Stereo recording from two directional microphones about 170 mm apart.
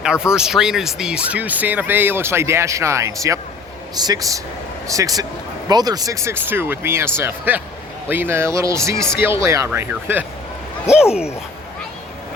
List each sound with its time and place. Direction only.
0.0 s speech: 5° right (ahead or behind)